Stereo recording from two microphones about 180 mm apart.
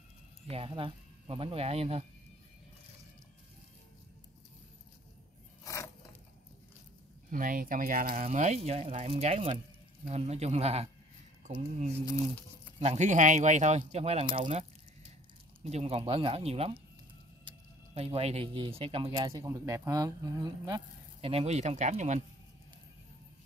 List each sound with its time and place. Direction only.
0.5 s speech: 30° right (ahead or behind)
5.6 s a sound: 20° left (ahead or behind)
7.2 s speech: 50° right (ahead or behind)
12.7 s speech: 40° right (ahead or behind); by 21.3 s 20° right (ahead or behind)
21.3 s speech: 35° right (ahead or behind)